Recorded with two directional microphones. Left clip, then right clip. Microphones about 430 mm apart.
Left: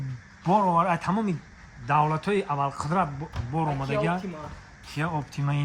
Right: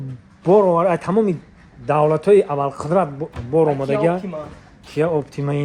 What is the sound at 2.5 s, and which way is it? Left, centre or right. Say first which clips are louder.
A man's voice: right 7 dB; right.